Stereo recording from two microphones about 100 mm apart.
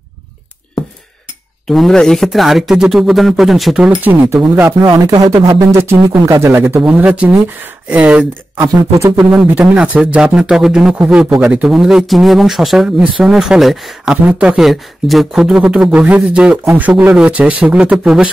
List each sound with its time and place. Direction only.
1.7 s speech: 5° left (ahead or behind)
4.0 s speech: 15° right (ahead or behind)
4.8 s speech: 40° right (ahead or behind); by 6.8 s 25° right (ahead or behind)
6.8 s speech: 10° right (ahead or behind)